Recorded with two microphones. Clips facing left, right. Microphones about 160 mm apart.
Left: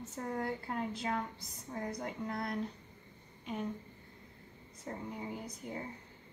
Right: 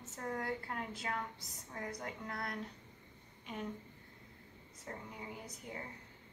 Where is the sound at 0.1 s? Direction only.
20° left (ahead or behind).